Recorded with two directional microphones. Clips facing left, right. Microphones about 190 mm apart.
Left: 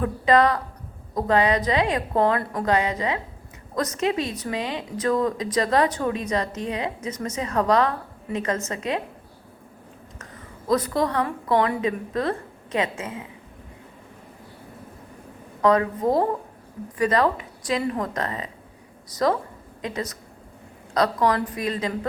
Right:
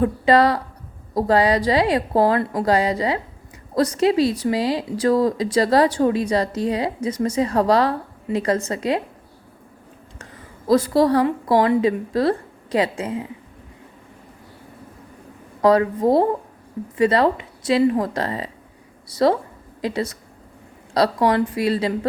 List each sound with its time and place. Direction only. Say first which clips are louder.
0.0 s speech: right 3 dB; 30° right (ahead or behind)
10.7 s speech: right 6 dB; 30° right (ahead or behind)
15.6 s a woman's voice: right 4 dB; 35° right (ahead or behind)